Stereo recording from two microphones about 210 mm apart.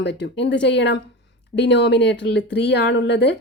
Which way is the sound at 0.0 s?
55° left (ahead or behind).